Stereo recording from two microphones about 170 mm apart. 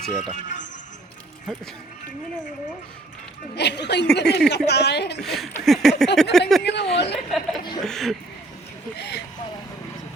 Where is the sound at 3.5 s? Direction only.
85° left.